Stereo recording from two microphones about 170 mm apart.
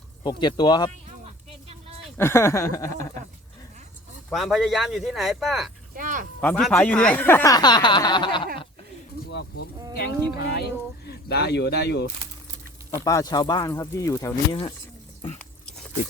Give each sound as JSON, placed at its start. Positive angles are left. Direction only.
{"t": 0.2, "sound": "speech", "side_deg": 25}
{"t": 2.1, "sound": "speech", "side_deg": 15}
{"t": 4.3, "sound": "speech", "side_deg": 0}
{"t": 5.9, "sound": "a sound", "side_deg": -50}
{"t": 6.4, "sound": "speech", "side_deg": 5}
{"t": 9.3, "sound": "insect", "side_deg": 90}
{"t": 9.9, "sound": "speech", "side_deg": 70}
{"t": 13.1, "sound": "speech", "side_deg": 20}